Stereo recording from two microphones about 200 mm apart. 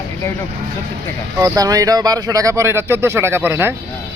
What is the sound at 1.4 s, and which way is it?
Speech, 15° right (ahead or behind).